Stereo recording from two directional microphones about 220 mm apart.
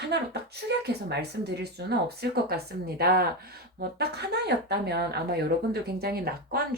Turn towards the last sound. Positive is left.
turn(degrees=-45)  # may be behind; listen again after turning